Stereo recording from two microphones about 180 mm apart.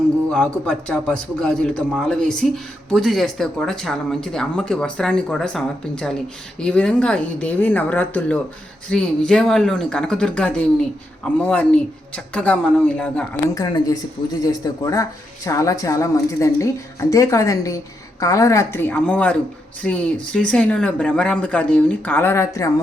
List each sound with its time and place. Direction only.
0.3 s speech: 5° left (ahead or behind)
13.5 s speech: 20° left (ahead or behind)